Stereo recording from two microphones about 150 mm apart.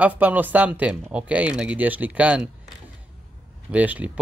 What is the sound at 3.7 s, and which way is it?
Speech, 10° right (ahead or behind).